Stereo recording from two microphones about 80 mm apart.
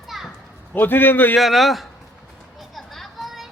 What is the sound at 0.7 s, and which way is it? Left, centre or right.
Speech, left.